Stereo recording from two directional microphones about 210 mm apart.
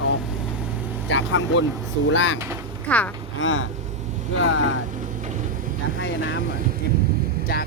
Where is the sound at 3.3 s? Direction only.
65° left (ahead or behind).